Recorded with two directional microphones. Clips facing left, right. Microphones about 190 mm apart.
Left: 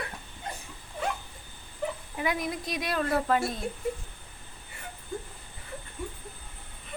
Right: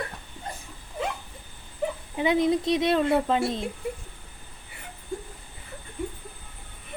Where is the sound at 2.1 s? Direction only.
25° right (ahead or behind).